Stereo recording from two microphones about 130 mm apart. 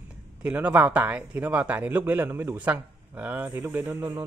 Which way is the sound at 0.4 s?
10° right (ahead or behind).